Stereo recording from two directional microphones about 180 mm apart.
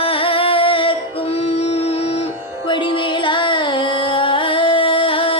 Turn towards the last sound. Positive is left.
turn(degrees=30)  # may be behind; listen again after turning